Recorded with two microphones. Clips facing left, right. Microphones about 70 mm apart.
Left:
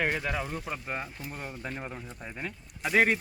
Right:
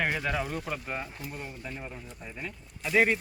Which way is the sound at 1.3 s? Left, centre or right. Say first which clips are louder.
Left 4 dB; left.